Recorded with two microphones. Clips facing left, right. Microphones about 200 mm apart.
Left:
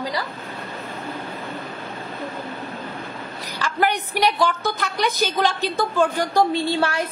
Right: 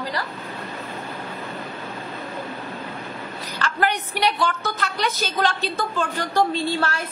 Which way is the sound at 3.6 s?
10° left (ahead or behind).